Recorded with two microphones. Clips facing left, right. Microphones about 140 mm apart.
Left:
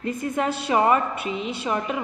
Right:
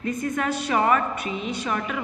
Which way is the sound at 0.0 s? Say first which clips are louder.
Left 1 dB; 30° left (ahead or behind).